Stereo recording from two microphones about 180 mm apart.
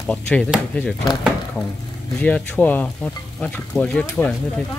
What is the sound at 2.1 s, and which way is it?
Speech, 5° left (ahead or behind).